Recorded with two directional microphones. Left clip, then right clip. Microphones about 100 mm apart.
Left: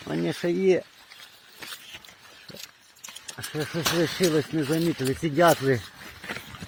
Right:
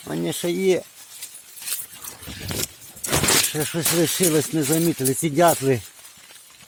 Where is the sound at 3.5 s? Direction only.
85° right.